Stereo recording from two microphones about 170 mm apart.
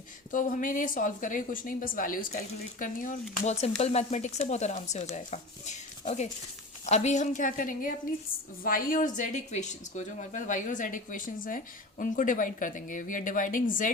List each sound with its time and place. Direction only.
0.3 s speech: 50° left (ahead or behind)